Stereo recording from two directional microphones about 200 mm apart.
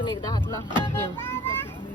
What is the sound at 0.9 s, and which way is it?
Speech, 10° left (ahead or behind).